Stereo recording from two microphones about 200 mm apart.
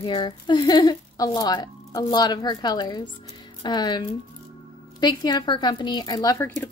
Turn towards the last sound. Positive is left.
turn(degrees=10)  # may be behind; listen again after turning